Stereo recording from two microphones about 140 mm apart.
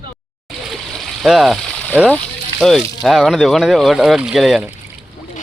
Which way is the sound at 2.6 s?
Centre (ahead or behind).